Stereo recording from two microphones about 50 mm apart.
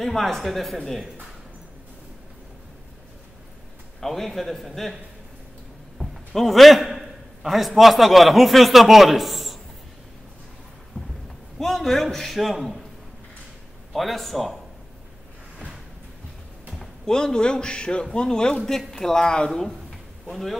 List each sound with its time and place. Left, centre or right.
0.0 s speech: centre
4.0 s speech: centre
6.3 s a man's voice: centre
10.9 s a sound: left
11.5 s a man's voice: centre
13.9 s speech: centre
17.0 s a man's voice: centre
19.9 s a sound: centre